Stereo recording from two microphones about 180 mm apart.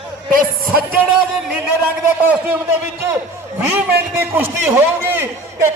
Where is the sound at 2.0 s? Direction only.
10° right (ahead or behind).